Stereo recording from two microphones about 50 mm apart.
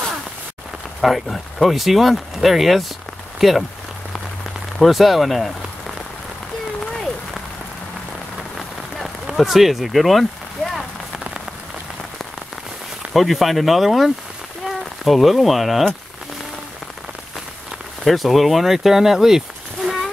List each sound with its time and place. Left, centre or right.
1.2 s speech: centre
4.7 s speech: centre
8.5 s rain on surface: centre
13.1 s speech: centre
18.0 s speech: centre